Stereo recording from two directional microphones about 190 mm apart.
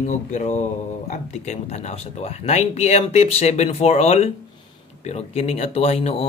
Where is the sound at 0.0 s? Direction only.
40° left (ahead or behind).